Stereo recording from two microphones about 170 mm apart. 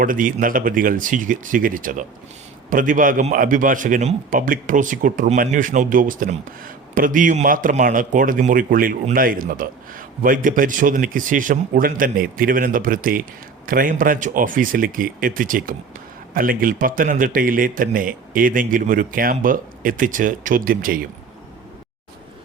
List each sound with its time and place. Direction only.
0.0 s speech: 55° right (ahead or behind)